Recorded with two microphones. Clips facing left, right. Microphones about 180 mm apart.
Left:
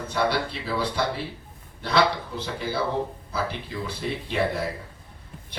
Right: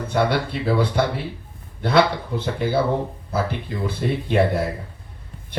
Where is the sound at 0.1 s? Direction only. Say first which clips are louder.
Right 4 dB; 55° right (ahead or behind).